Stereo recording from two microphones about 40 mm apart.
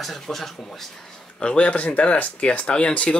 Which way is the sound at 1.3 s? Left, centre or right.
Left.